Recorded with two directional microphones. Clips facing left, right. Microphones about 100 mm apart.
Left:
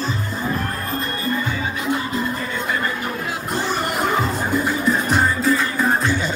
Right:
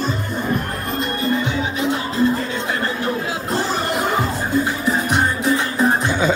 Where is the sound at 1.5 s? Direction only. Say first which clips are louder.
Right 2 dB; 25° right (ahead or behind).